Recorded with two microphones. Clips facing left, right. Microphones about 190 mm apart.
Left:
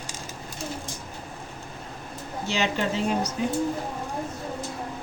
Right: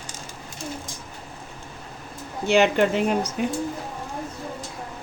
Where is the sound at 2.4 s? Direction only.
60° right (ahead or behind).